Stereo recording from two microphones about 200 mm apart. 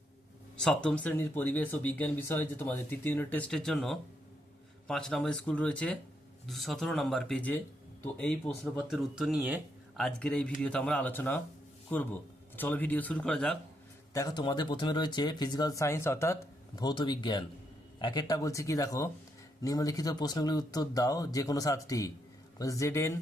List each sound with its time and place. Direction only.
0.6 s speech: 5° left (ahead or behind)
14.1 s speech: 15° left (ahead or behind)